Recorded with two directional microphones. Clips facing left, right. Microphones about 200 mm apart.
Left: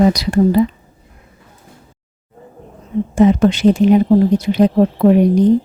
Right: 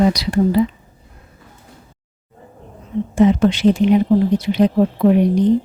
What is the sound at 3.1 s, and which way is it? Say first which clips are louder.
Speech: left 2 dB; 45° left (ahead or behind).